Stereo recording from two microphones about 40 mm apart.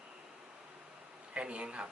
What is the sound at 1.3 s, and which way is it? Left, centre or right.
Speech, right.